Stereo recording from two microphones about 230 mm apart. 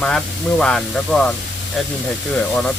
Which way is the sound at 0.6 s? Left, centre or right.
Centre.